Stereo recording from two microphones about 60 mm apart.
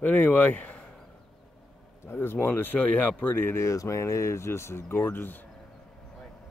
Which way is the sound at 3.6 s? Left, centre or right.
Left.